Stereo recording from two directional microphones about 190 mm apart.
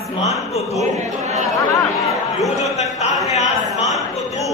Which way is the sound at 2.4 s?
35° left (ahead or behind).